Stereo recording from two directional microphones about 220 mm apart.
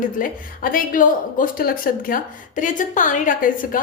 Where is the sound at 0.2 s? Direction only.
40° left (ahead or behind).